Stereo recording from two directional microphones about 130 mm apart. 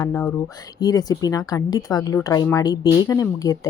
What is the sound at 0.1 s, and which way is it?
Speech, 5° left (ahead or behind).